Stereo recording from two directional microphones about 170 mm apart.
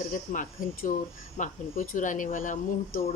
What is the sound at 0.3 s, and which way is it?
Speech, 50° left (ahead or behind).